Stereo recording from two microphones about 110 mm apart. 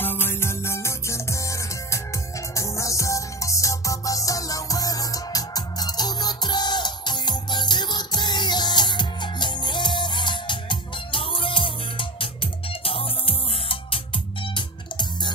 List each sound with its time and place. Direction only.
0.0 s music: 20° left (ahead or behind); by 14.0 s 55° left (ahead or behind)
14.5 s music: 45° left (ahead or behind)